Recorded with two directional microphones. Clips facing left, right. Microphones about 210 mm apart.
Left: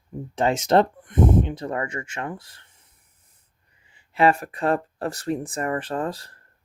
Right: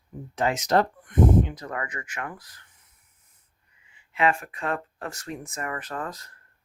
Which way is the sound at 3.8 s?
35° left (ahead or behind).